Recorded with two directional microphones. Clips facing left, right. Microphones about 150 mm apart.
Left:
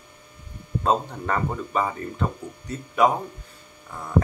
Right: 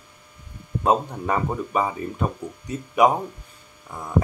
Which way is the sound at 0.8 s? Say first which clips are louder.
Right 2 dB; 15° right (ahead or behind).